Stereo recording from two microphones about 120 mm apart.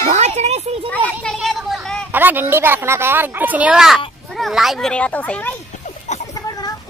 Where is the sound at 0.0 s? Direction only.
65° right (ahead or behind).